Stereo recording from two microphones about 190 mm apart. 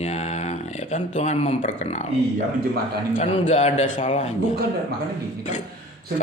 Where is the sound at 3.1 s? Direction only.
35° left (ahead or behind).